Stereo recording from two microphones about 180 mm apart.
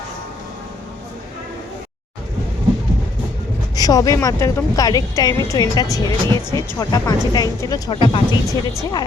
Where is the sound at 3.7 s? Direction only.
20° left (ahead or behind).